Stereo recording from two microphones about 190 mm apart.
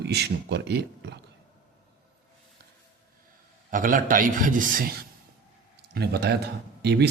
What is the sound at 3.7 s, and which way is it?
A man's voice, 45° right (ahead or behind).